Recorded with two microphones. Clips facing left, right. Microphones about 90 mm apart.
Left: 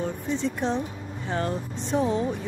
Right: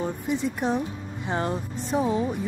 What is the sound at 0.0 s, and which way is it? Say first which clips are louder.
Speech: right 1 dB; 10° right (ahead or behind).